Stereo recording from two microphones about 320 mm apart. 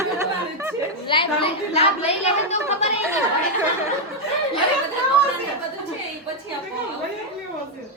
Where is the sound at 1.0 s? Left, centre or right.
Centre.